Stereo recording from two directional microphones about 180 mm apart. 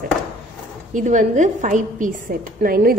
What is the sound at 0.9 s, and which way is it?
A woman's voice, 45° right (ahead or behind).